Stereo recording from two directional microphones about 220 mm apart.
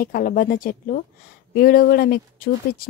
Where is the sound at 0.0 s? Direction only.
40° left (ahead or behind).